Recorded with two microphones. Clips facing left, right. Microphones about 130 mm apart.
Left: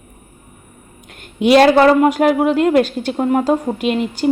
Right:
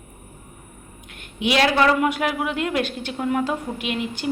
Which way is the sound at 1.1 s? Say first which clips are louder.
Left 11 dB; 45° left (ahead or behind).